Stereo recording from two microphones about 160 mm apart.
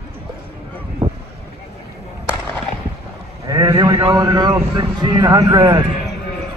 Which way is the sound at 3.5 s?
20° right (ahead or behind).